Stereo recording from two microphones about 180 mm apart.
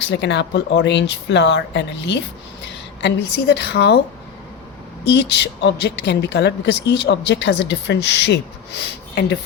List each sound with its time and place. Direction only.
0.1 s speech: 70° left (ahead or behind)
5.0 s speech: 70° left (ahead or behind)